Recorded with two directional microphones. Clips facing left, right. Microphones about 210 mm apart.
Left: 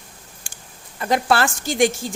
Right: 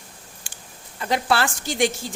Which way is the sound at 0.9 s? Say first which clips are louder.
Left 3 dB; 45° left (ahead or behind).